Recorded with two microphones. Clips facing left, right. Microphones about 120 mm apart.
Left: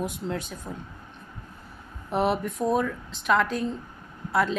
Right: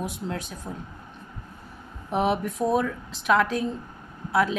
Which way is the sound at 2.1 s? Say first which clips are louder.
Right 1 dB; centre (ahead or behind).